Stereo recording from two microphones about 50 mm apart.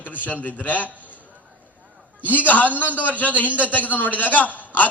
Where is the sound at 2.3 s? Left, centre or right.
Left.